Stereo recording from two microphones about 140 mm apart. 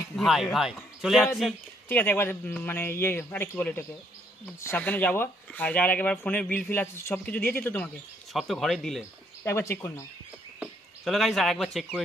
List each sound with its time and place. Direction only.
0.1 s speech: centre (ahead or behind)
1.9 s speech: 15° left (ahead or behind)
8.3 s a man's voice: centre (ahead or behind)
9.4 s speech: 15° left (ahead or behind)
11.1 s a man's voice: centre (ahead or behind)